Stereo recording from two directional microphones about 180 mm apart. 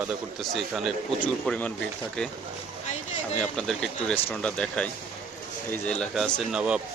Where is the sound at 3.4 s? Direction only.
5° left (ahead or behind).